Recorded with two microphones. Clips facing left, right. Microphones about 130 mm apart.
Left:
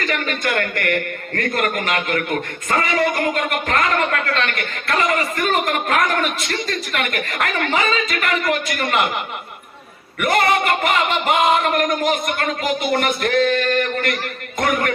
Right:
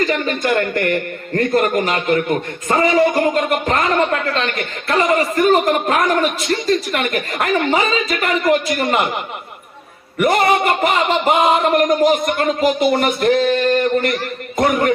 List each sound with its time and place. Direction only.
0.1 s speech: 25° right (ahead or behind)
10.2 s a sound: 30° right (ahead or behind)
14.6 s speech: 25° right (ahead or behind)